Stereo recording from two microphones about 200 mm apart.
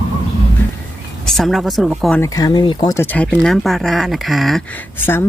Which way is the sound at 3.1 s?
5° left (ahead or behind).